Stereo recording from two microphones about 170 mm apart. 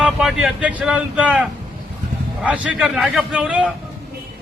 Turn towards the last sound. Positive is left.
turn(degrees=-5)  # may be behind; listen again after turning